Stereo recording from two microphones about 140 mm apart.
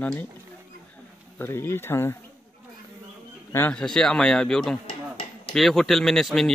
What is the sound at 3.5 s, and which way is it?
Speech, 10° left (ahead or behind).